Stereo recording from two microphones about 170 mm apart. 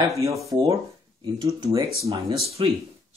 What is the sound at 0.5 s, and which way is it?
Speech, 20° right (ahead or behind).